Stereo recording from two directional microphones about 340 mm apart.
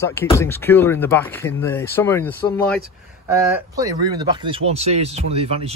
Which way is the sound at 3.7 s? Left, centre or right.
Centre.